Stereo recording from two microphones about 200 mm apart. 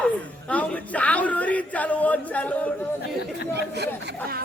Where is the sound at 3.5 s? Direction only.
55° right (ahead or behind).